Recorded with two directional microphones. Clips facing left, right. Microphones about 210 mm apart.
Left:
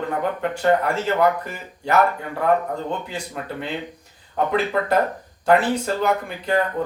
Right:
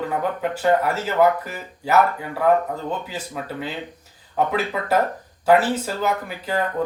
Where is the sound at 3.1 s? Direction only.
5° right (ahead or behind).